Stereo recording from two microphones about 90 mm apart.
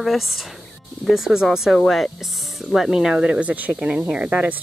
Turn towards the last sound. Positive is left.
turn(degrees=-15)  # may be behind; listen again after turning